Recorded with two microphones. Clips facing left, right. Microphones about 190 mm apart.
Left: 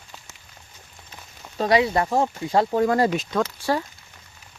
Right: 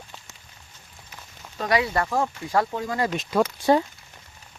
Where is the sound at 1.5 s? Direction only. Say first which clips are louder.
Left 4 dB; 25° left (ahead or behind).